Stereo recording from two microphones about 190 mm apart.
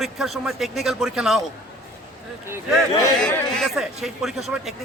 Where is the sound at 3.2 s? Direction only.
5° left (ahead or behind).